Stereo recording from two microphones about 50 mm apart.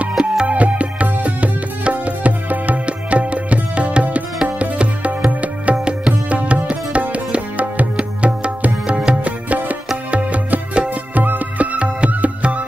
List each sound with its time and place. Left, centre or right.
0.2 s music: right